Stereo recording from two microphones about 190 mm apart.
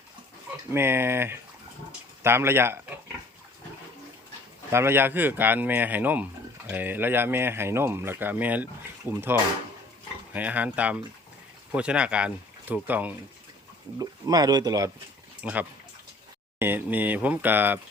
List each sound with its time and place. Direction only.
0.7 s speech: 10° right (ahead or behind)
1.9 s a sound: 10° right (ahead or behind)
4.7 s speech: 15° right (ahead or behind)
10.3 s speech: 10° right (ahead or behind)
14.0 s speech: 20° right (ahead or behind)
15.4 s speech: 5° right (ahead or behind)